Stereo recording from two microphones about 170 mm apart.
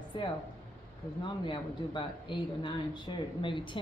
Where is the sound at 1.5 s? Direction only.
30° left (ahead or behind).